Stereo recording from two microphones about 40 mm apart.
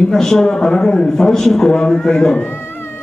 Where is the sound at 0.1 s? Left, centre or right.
Centre.